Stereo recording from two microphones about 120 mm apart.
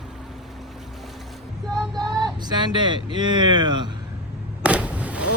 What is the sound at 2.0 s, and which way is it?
Vehicle, 35° right (ahead or behind).